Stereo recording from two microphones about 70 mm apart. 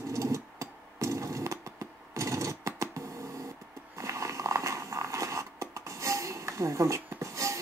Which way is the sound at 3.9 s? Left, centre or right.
Right.